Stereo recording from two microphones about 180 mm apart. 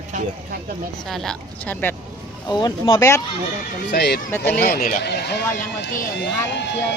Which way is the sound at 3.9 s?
65° left (ahead or behind).